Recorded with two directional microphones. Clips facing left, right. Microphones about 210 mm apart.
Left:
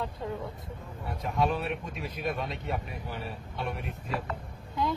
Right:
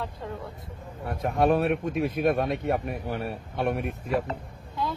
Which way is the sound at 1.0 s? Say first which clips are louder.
Right 6 dB; 55° right (ahead or behind).